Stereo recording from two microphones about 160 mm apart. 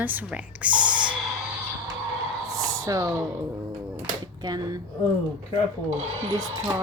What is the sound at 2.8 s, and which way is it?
Speech, 20° right (ahead or behind).